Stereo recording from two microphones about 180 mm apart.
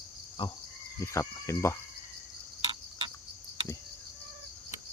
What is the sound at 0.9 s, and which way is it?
Speech, 15° left (ahead or behind).